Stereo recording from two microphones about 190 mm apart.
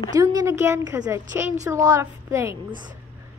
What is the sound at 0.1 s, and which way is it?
A woman's voice, 20° right (ahead or behind).